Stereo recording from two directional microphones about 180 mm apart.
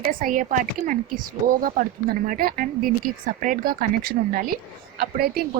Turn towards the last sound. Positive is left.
turn(degrees=-55)  # may be behind; listen again after turning